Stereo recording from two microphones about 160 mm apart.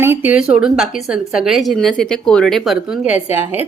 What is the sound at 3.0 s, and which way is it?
Speech, 50° left (ahead or behind).